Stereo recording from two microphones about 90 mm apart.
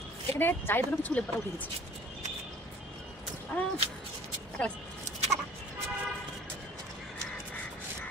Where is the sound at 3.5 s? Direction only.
15° left (ahead or behind).